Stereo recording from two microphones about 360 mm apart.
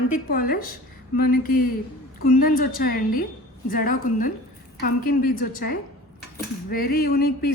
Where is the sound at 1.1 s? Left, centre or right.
Left.